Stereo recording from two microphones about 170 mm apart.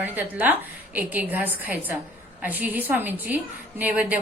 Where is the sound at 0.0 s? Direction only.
10° right (ahead or behind).